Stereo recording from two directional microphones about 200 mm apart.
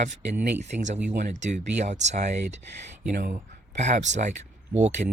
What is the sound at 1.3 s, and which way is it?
Speech, 35° right (ahead or behind).